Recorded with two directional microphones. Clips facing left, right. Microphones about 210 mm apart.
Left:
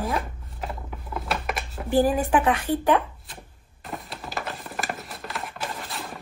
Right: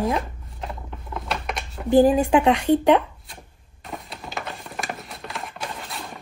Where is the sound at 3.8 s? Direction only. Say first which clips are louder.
Even; centre (ahead or behind).